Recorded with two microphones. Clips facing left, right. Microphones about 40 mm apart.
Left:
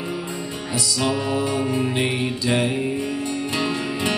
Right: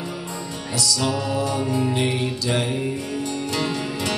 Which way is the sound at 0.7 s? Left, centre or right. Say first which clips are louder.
Even; left.